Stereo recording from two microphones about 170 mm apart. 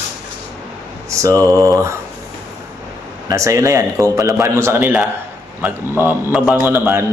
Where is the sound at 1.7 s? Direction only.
15° right (ahead or behind).